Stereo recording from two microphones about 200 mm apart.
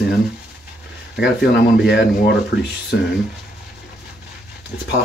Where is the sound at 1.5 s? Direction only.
60° left (ahead or behind).